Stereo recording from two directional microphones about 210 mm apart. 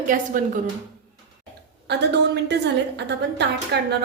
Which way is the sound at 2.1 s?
55° right (ahead or behind).